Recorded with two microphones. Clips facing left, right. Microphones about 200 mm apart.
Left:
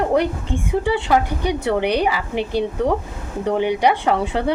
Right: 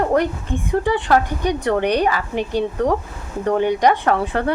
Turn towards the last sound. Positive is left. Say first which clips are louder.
# even
turn(degrees=15)  # may be behind; listen again after turning